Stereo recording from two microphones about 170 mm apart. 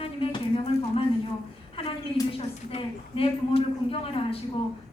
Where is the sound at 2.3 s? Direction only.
35° left (ahead or behind).